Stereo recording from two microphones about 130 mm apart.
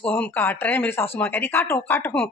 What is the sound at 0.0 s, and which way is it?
Speech, 15° left (ahead or behind).